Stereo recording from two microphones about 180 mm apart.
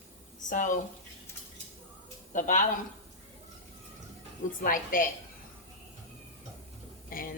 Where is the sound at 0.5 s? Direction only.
45° left (ahead or behind).